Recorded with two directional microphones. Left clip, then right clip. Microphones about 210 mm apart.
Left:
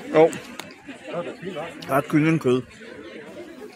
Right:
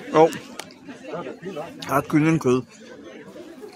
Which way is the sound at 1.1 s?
45° left (ahead or behind).